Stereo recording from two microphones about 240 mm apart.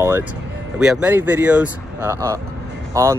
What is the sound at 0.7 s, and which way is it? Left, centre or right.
Speech, centre.